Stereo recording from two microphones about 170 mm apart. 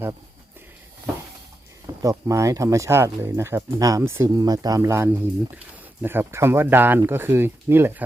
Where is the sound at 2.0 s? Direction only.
20° right (ahead or behind).